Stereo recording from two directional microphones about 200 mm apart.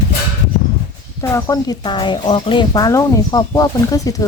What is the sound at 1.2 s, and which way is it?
Speech, 15° left (ahead or behind).